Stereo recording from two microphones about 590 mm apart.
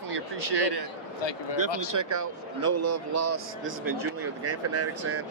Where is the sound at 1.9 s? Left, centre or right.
Right.